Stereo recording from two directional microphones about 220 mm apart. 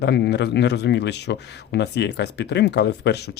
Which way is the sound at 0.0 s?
50° left (ahead or behind).